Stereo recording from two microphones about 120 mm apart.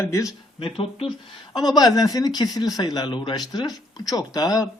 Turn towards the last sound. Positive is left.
turn(degrees=30)  # may be behind; listen again after turning